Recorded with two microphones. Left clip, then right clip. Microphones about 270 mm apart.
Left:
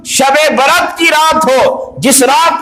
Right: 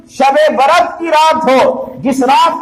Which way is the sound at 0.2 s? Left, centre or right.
Left.